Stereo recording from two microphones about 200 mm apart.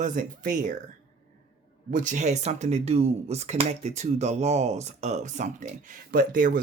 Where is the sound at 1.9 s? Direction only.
40° right (ahead or behind).